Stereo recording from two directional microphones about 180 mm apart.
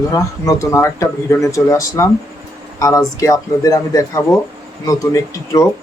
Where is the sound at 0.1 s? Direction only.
15° left (ahead or behind).